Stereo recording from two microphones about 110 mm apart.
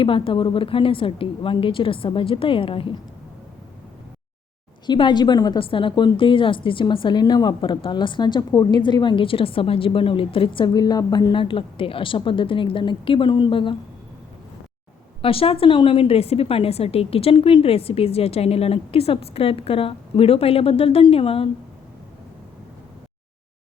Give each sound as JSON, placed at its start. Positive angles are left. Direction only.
{"t": 0.0, "sound": "a woman's voice", "side_deg": 50}
{"t": 4.9, "sound": "a woman's voice", "side_deg": 45}
{"t": 15.2, "sound": "a woman's voice", "side_deg": 55}